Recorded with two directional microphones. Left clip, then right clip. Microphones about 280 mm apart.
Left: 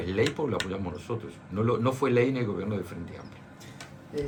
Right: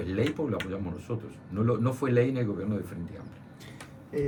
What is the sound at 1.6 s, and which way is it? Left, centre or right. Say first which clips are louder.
Speech: left 3 dB; left.